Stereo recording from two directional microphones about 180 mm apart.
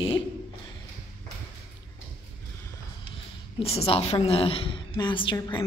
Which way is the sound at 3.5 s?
35° left (ahead or behind).